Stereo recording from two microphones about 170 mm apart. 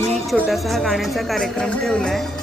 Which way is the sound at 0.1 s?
Centre (ahead or behind).